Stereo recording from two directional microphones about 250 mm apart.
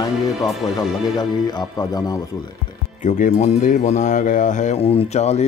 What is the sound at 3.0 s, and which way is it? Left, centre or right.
Speech, left.